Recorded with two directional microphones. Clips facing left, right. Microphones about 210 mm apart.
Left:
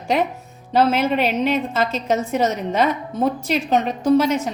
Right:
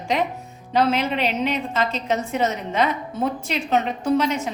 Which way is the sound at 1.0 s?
45° left (ahead or behind).